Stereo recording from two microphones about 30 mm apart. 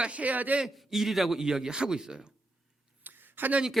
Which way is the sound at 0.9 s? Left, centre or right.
Centre.